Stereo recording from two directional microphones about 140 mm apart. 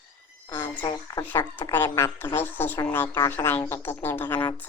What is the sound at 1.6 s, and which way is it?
A woman's voice, 20° left (ahead or behind).